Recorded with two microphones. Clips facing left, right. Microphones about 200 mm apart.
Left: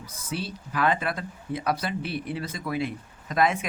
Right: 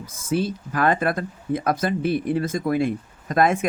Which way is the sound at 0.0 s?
50° right (ahead or behind).